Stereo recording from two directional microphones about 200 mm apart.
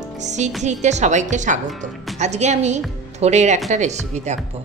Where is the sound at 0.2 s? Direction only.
35° right (ahead or behind).